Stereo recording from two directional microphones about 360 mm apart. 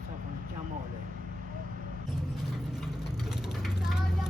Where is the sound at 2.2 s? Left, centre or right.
Centre.